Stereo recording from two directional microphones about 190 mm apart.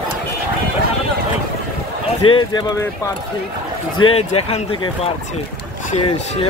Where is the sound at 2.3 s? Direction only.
20° left (ahead or behind).